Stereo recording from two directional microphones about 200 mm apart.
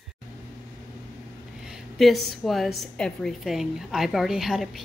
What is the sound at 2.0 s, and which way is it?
A woman's voice, centre (ahead or behind).